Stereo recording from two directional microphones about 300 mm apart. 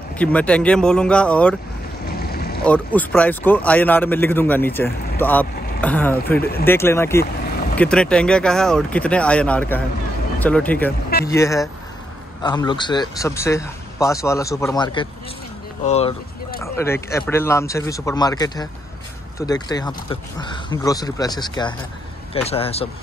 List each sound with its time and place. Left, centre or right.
0.2 s speech: centre
2.1 s a sound: left
2.6 s speech: centre; by 16.2 s left
16.6 s speech: centre